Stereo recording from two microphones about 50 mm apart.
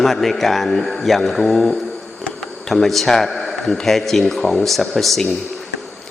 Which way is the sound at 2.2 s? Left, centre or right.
Centre.